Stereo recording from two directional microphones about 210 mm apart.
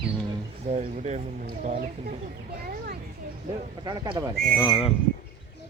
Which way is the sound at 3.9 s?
20° right (ahead or behind).